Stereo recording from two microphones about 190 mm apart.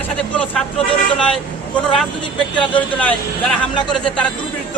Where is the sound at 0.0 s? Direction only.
5° left (ahead or behind).